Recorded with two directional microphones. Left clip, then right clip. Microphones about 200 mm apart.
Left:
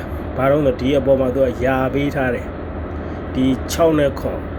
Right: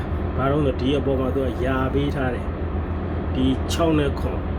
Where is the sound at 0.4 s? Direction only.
30° left (ahead or behind).